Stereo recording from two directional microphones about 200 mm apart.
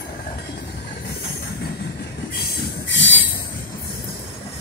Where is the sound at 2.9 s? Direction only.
70° left (ahead or behind).